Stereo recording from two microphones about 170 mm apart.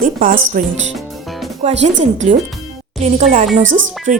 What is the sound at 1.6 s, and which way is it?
Speech, 40° right (ahead or behind).